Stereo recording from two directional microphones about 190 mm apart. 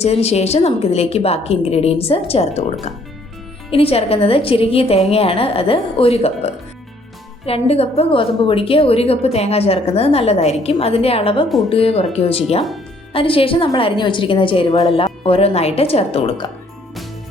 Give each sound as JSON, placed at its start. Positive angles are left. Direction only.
{"t": 0.0, "sound": "a woman's voice", "side_deg": 35}
{"t": 3.7, "sound": "a woman's voice", "side_deg": 30}